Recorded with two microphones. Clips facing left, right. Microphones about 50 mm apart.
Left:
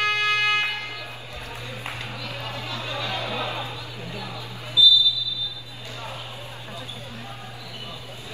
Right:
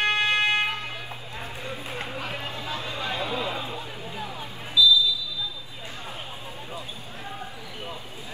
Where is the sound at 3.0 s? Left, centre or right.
Right.